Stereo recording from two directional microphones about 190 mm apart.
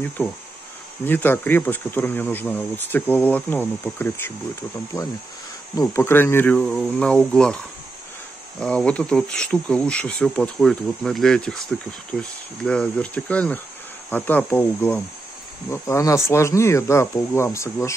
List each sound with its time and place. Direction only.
0.2 s speech: 10° left (ahead or behind)